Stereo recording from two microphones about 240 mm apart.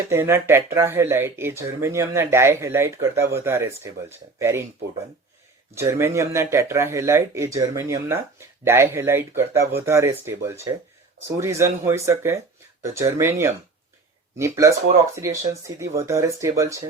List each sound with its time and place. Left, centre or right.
0.1 s speech: centre
5.7 s speech: centre